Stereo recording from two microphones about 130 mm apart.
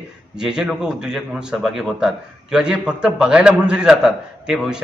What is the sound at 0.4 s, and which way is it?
A man's voice, 5° right (ahead or behind).